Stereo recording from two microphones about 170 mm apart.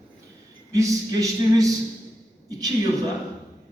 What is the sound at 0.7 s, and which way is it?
A man's voice, 20° right (ahead or behind).